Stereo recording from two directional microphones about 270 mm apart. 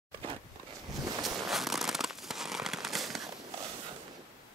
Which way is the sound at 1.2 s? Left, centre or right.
Centre.